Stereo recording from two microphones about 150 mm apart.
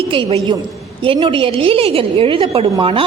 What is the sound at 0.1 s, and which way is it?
A woman's voice, 40° right (ahead or behind).